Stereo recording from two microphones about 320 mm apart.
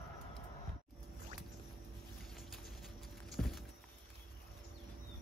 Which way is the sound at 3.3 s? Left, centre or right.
Centre.